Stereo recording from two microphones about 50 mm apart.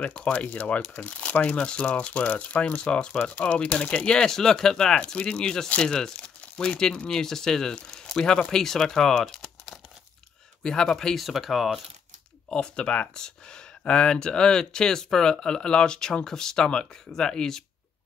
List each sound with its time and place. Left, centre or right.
0.0 s speech: centre
11.1 s speech: centre
12.4 s speech: centre